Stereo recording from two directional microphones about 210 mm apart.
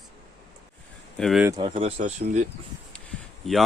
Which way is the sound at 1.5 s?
20° right (ahead or behind).